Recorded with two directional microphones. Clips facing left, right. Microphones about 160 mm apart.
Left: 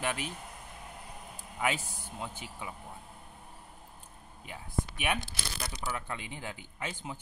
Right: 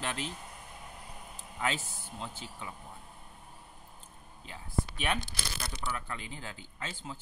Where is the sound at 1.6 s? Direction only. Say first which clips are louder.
Left 2 dB; 15° left (ahead or behind).